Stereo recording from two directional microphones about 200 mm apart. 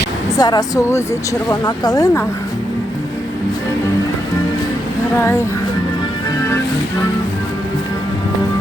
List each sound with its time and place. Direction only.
0.3 s speech: 20° left (ahead or behind)
5.1 s speech: 15° left (ahead or behind)